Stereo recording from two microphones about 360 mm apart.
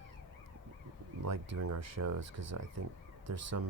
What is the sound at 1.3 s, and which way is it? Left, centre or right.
Speech, right.